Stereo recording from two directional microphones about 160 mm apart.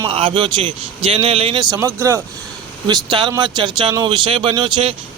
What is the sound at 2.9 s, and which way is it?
Speech, 30° right (ahead or behind).